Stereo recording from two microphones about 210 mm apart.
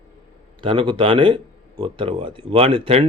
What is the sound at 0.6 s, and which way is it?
Speech, 25° right (ahead or behind).